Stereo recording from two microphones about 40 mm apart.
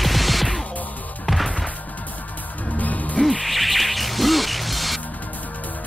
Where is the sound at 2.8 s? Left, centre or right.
Left.